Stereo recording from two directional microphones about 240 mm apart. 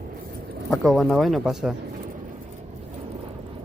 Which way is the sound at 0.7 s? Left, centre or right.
Centre.